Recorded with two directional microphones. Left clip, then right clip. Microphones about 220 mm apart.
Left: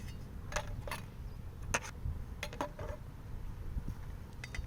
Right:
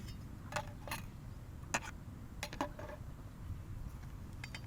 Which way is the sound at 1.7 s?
15° left (ahead or behind).